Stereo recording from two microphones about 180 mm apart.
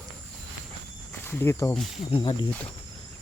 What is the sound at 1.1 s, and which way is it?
Speech, 10° left (ahead or behind).